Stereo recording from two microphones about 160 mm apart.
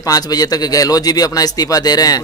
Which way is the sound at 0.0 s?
25° left (ahead or behind).